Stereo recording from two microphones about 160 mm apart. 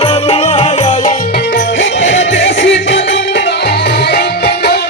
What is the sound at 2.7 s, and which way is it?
Music, 90° left.